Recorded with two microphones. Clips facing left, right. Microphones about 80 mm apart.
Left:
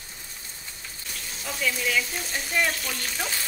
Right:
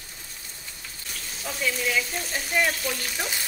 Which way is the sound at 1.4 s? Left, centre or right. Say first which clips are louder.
Even; centre.